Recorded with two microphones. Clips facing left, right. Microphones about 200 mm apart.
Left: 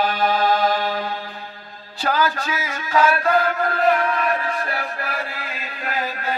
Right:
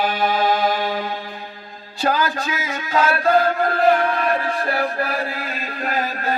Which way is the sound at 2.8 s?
25° right (ahead or behind).